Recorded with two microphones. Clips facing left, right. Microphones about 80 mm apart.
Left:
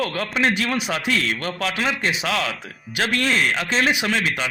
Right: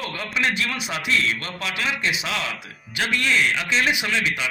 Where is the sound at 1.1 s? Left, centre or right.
Left.